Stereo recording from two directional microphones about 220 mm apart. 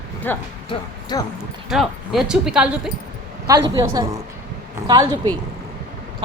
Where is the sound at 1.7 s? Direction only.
Centre (ahead or behind).